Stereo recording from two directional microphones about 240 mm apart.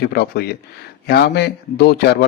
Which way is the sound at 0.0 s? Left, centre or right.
Left.